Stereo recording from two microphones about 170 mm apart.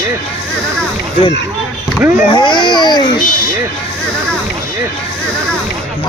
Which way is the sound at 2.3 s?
25° left (ahead or behind).